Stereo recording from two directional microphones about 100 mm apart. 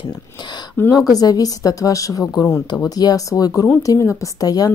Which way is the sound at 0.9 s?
40° left (ahead or behind).